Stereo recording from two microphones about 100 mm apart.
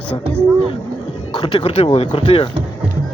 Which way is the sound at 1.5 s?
65° left (ahead or behind).